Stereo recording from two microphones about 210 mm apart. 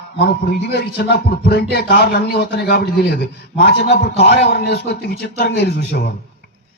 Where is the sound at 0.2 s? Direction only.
50° left (ahead or behind).